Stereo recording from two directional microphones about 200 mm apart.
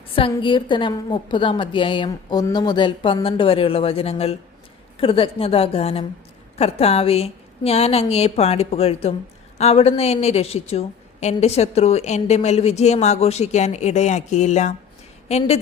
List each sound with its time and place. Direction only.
0.2 s a woman's voice: 25° left (ahead or behind)